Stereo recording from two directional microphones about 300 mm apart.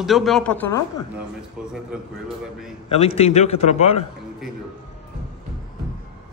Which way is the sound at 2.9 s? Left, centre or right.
Centre.